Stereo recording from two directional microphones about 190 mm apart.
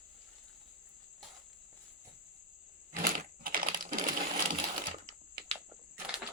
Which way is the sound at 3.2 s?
45° right (ahead or behind).